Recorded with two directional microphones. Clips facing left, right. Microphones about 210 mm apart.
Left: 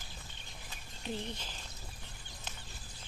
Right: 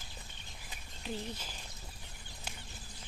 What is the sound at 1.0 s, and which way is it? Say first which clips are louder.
Speech: left 1 dB; 10° right (ahead or behind).